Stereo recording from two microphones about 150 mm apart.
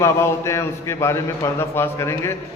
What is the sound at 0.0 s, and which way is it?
A man's voice, 20° left (ahead or behind).